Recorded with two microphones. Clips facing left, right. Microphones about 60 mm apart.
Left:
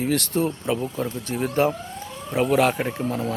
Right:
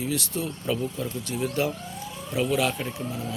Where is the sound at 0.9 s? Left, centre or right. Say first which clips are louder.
Left 4 dB; left.